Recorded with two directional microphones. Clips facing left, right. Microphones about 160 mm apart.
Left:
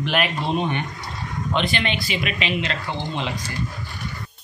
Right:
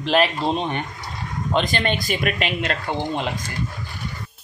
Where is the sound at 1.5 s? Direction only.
40° right (ahead or behind).